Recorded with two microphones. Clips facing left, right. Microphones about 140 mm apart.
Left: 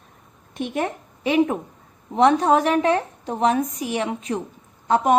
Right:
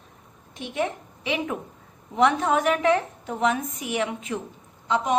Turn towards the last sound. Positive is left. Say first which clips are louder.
# left 5 dB
turn(degrees=50)  # may be behind; listen again after turning